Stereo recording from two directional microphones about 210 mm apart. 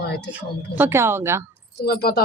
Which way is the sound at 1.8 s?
45° left (ahead or behind).